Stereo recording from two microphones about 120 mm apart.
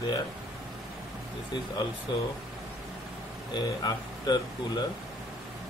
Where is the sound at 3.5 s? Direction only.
35° left (ahead or behind).